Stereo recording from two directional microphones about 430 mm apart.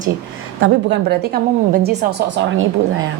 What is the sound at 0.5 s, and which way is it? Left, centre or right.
A woman's voice, right.